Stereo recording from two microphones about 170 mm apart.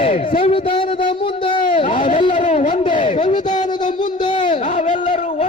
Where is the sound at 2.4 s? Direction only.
45° left (ahead or behind).